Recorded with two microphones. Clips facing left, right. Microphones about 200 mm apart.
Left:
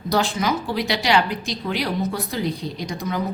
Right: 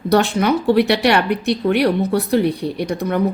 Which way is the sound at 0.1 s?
60° right (ahead or behind).